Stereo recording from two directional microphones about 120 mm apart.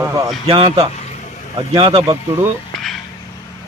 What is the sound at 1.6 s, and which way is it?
Speech, 45° right (ahead or behind).